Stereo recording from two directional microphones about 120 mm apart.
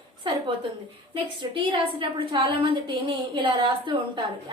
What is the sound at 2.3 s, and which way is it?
A woman's voice, 45° right (ahead or behind).